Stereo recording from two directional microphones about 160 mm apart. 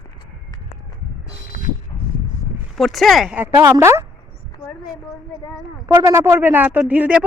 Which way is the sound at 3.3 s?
15° right (ahead or behind).